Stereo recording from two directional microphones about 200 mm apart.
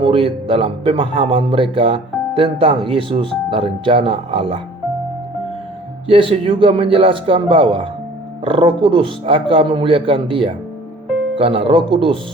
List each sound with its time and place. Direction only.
0.0 s a man's voice: 25° right (ahead or behind)
6.1 s a man's voice: 25° right (ahead or behind)